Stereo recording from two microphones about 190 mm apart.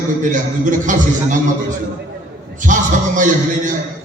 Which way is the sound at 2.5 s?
45° right (ahead or behind).